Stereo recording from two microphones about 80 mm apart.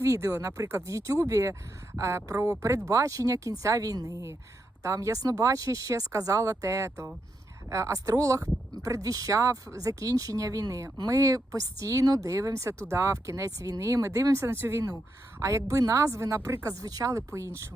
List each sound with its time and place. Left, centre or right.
0.0 s speech: right